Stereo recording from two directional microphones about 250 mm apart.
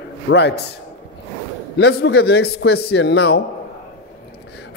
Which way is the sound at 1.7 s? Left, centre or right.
Left.